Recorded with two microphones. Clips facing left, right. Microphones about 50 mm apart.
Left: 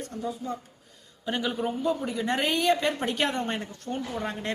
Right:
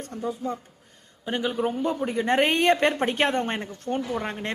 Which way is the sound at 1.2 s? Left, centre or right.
Right.